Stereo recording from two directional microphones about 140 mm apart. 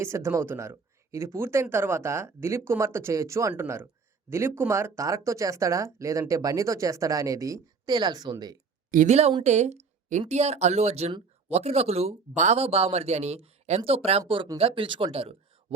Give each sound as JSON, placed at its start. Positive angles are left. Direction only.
{"t": 0.0, "sound": "speech", "side_deg": -20}
{"t": 8.9, "sound": "a woman's voice", "side_deg": -70}
{"t": 9.4, "sound": "speech", "side_deg": -55}